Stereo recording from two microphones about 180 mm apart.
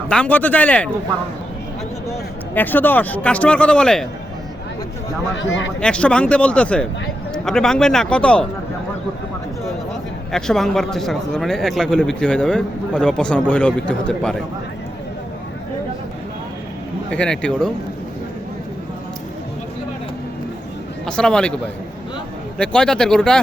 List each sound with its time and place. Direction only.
0.1 s a man's voice: 5° left (ahead or behind)
2.6 s a man's voice: 10° left (ahead or behind)
5.3 s a man's voice: 90° left
5.8 s a man's voice: 5° left (ahead or behind)
10.3 s speech: centre (ahead or behind)
17.1 s speech: 5° left (ahead or behind)
21.1 s speech: 5° left (ahead or behind)
22.5 s speech: 5° left (ahead or behind)